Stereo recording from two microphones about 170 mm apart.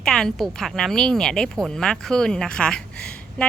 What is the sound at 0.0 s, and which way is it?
A woman's voice, 5° left (ahead or behind).